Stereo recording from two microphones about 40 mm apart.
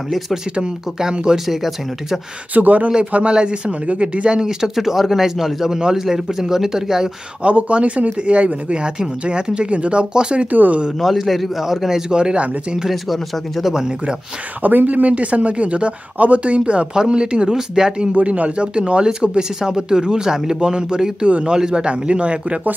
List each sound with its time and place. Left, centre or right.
0.6 s speech: right
1.5 s speech: centre
2.5 s speech: right
4.4 s speech: centre
7.4 s speech: right
10.5 s speech: right
11.0 s a man's voice: centre
12.1 s speech: right
12.9 s a man's voice: centre
14.6 s speech: right
18.1 s speech: right